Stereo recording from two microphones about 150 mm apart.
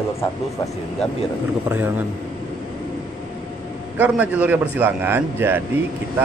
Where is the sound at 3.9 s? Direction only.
10° right (ahead or behind).